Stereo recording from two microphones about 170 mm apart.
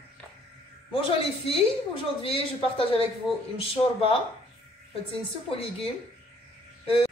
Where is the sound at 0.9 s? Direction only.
35° left (ahead or behind).